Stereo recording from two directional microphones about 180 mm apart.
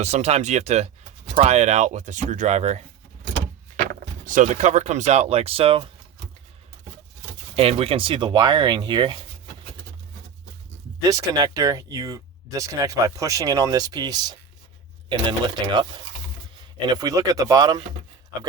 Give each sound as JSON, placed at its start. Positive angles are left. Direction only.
{"t": 0.0, "sound": "speech", "side_deg": -40}
{"t": 4.3, "sound": "speech", "side_deg": -45}
{"t": 7.5, "sound": "speech", "side_deg": -35}
{"t": 11.0, "sound": "speech", "side_deg": -20}
{"t": 16.9, "sound": "speech", "side_deg": -20}